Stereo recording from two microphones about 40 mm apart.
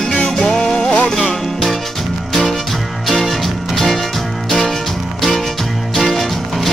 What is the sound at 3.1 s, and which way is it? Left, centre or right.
Music, centre.